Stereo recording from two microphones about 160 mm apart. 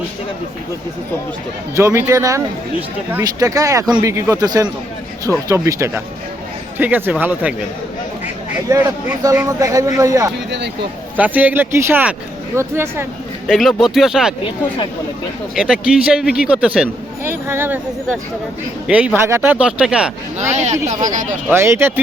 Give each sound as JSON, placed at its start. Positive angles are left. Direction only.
{"t": 1.7, "sound": "speech", "side_deg": -15}
{"t": 8.7, "sound": "speech", "side_deg": -20}
{"t": 11.2, "sound": "speech", "side_deg": -10}
{"t": 13.5, "sound": "speech", "side_deg": 0}
{"t": 15.5, "sound": "speech", "side_deg": -5}
{"t": 20.4, "sound": "speech", "side_deg": -45}
{"t": 21.5, "sound": "speech", "side_deg": -15}